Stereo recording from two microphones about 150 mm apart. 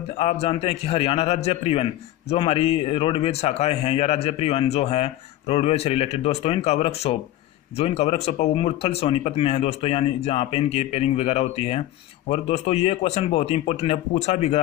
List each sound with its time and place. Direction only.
0.1 s a man's voice: 45° left (ahead or behind)